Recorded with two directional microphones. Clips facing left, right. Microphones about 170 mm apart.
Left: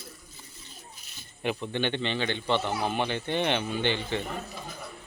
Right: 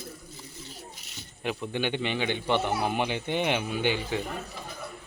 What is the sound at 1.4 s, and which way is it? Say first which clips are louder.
A man's voice: left 1 dB; centre (ahead or behind).